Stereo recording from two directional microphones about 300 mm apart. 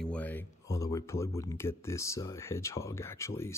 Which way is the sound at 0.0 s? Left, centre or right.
Centre.